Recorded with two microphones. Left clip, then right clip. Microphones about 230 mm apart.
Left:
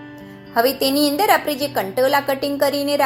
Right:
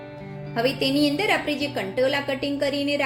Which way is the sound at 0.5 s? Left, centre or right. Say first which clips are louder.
Left 5 dB; centre.